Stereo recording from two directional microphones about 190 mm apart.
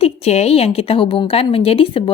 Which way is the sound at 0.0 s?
35° left (ahead or behind).